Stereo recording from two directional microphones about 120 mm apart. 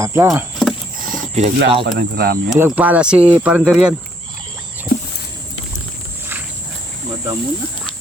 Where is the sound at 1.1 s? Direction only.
80° right.